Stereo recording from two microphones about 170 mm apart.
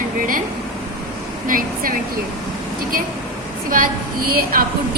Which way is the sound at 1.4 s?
55° right (ahead or behind).